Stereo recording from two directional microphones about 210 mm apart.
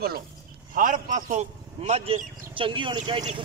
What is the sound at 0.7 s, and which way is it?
Speech, 40° right (ahead or behind).